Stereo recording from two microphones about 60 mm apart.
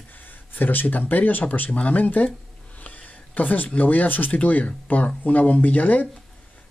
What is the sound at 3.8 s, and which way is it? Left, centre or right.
Speech, left.